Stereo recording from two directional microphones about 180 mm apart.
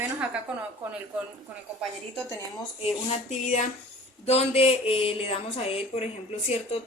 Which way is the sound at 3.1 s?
40° left (ahead or behind).